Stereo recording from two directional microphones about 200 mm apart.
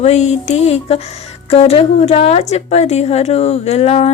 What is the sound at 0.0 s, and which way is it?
Speech, 35° left (ahead or behind).